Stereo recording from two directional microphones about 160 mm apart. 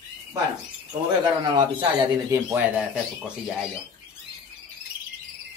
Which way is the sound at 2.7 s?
Centre (ahead or behind).